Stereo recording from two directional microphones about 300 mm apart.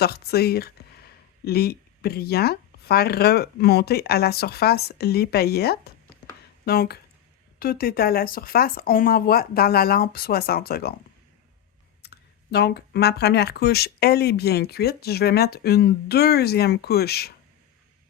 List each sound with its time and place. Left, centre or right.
0.0 s speech: left
12.0 s speech: left